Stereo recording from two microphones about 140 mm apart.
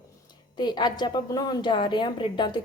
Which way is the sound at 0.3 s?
30° left (ahead or behind).